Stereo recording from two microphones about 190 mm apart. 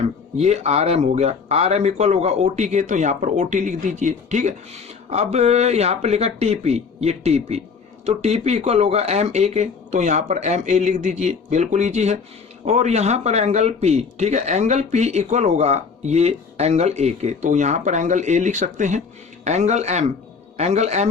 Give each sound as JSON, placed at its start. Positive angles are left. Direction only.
{"t": 0.3, "sound": "speech", "side_deg": -35}